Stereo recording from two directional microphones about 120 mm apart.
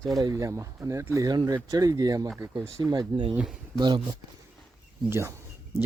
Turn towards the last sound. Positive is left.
turn(degrees=-20)  # may be behind; listen again after turning